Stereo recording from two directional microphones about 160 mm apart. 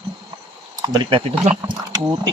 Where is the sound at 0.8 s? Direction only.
30° right (ahead or behind).